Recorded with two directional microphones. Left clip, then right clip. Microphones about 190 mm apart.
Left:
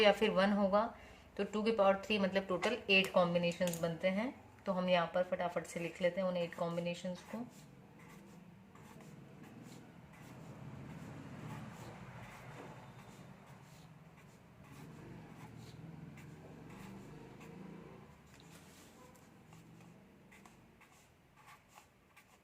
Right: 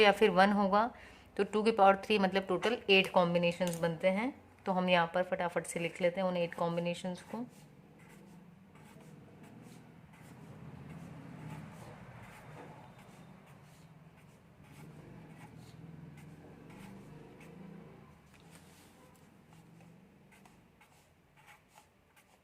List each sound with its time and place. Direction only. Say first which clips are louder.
0.0 s speech: right 5 dB; 45° right (ahead or behind)